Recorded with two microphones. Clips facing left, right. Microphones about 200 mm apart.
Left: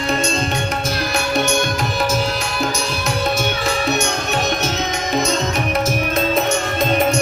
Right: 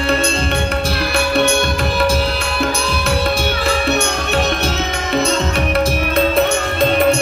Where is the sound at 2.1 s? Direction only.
30° right (ahead or behind).